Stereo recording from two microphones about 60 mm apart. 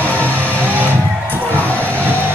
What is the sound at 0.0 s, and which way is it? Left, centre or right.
Music, left.